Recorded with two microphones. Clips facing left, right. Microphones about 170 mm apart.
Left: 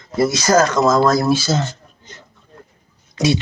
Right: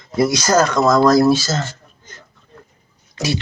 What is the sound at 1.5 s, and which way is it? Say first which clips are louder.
Speech: left 3 dB; 15° left (ahead or behind).